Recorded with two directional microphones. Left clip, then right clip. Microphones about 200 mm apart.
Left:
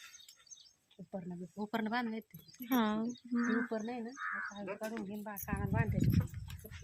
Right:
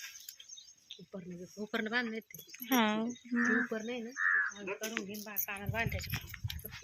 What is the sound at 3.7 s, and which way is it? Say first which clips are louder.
Speech: right 1 dB; 50° left (ahead or behind).